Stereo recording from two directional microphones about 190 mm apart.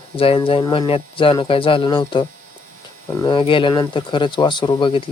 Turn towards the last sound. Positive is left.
turn(degrees=25)  # may be behind; listen again after turning